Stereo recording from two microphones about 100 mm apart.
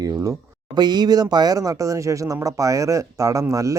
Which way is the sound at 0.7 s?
45° right (ahead or behind).